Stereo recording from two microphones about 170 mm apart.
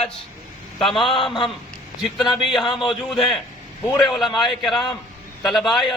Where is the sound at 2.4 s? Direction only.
Centre (ahead or behind).